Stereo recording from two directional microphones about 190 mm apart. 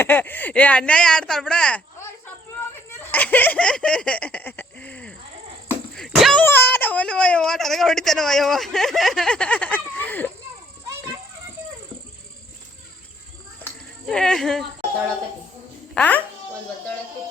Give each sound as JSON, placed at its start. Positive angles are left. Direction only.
{"t": 0.0, "sound": "speech", "side_deg": 10}
{"t": 3.1, "sound": "a sound", "side_deg": 10}
{"t": 6.4, "sound": "speech", "side_deg": 10}
{"t": 14.1, "sound": "speech", "side_deg": 5}
{"t": 16.0, "sound": "speech", "side_deg": 10}